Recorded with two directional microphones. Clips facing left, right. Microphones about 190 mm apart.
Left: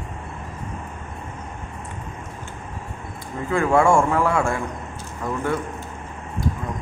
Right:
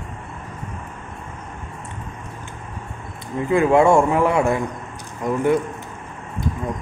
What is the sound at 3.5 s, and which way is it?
Speech, 20° right (ahead or behind).